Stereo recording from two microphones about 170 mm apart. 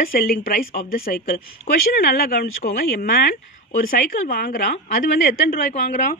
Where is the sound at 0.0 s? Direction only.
60° left (ahead or behind).